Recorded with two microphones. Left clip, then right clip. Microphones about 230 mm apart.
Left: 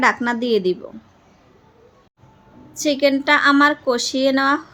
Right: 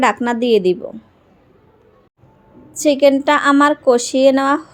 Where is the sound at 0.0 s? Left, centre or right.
Centre.